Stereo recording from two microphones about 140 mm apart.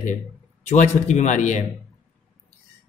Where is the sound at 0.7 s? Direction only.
55° left (ahead or behind).